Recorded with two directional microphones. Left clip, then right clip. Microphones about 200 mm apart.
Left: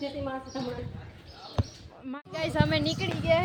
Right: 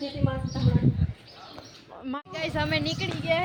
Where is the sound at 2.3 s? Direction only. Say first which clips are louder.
Left 1 dB; 5° left (ahead or behind).